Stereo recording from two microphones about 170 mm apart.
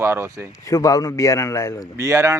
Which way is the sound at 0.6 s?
20° left (ahead or behind).